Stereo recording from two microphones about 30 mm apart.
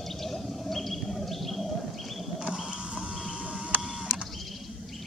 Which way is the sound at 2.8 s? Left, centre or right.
Right.